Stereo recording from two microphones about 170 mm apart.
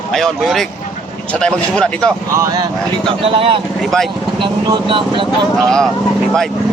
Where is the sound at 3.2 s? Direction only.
35° right (ahead or behind).